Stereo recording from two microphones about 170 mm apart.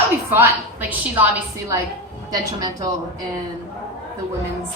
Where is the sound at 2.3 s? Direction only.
20° right (ahead or behind).